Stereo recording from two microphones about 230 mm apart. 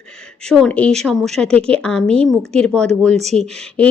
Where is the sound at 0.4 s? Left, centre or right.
Centre.